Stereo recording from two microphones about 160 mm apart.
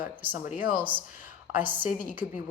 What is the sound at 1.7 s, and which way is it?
Speech, 10° right (ahead or behind).